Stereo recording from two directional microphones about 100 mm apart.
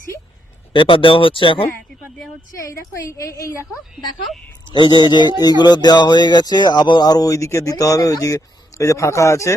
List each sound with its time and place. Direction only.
0.7 s speech: 60° left (ahead or behind)
2.5 s a woman's voice: 30° left (ahead or behind)
4.7 s a woman's voice: 50° left (ahead or behind); by 9.6 s 30° left (ahead or behind)